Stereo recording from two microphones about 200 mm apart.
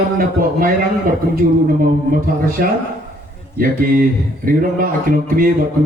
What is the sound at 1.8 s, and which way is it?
Speech, 45° right (ahead or behind).